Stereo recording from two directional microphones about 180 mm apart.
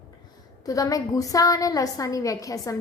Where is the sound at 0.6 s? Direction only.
20° left (ahead or behind).